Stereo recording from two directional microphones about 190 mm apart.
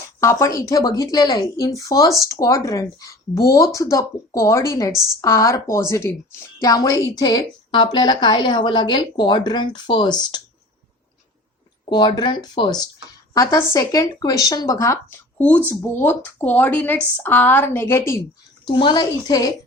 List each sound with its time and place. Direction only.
0.2 s a woman's voice: 15° left (ahead or behind)
11.9 s a woman's voice: 25° left (ahead or behind)
18.7 s a woman's voice: 25° left (ahead or behind)